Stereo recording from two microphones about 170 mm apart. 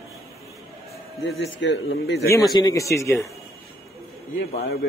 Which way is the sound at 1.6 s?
90° left.